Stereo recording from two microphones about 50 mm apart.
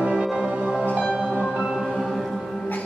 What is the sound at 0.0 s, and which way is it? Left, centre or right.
Music, centre.